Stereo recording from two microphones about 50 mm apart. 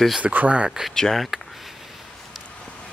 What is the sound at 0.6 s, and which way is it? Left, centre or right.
Speech, centre.